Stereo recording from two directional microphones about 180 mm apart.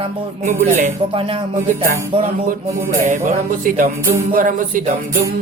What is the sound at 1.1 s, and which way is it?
Music, 30° right (ahead or behind).